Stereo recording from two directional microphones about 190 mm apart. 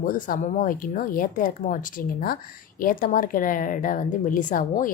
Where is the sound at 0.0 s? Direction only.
45° left (ahead or behind).